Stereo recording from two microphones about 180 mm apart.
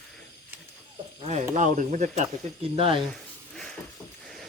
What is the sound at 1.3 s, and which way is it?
Speech, 40° right (ahead or behind).